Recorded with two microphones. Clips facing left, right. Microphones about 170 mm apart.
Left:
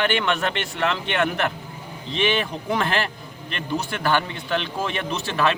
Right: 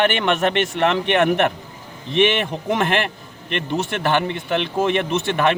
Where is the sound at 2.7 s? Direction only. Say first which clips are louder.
Right 4 dB; 20° right (ahead or behind).